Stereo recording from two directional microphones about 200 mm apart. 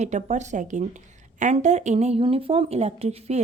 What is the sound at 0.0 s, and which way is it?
Speech, 35° right (ahead or behind).